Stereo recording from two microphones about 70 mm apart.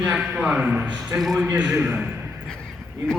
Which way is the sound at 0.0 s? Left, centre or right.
Centre.